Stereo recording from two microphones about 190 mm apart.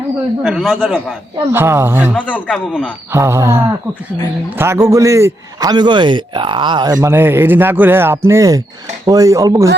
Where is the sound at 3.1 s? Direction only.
15° right (ahead or behind).